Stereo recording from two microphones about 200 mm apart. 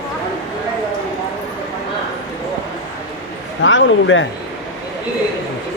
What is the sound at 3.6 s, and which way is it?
Speech, 70° left (ahead or behind).